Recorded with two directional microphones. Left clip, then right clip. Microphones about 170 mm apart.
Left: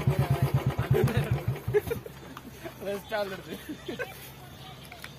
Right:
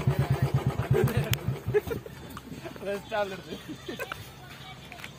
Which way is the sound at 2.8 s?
10° left (ahead or behind).